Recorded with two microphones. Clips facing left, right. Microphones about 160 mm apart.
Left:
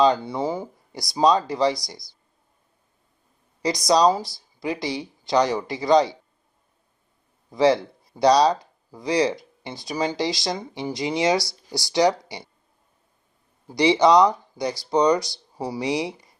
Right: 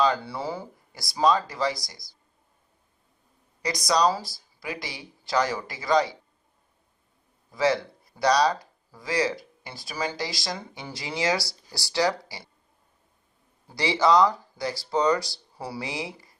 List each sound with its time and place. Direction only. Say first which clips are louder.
0.0 s speech: left 5 dB; 20° left (ahead or behind)
3.6 s speech: left 5 dB; 25° left (ahead or behind)
7.5 s speech: left 5 dB; 25° left (ahead or behind)
13.7 s speech: left 5 dB; 20° left (ahead or behind)